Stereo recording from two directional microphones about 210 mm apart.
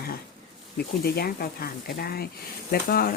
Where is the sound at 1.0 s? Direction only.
45° left (ahead or behind).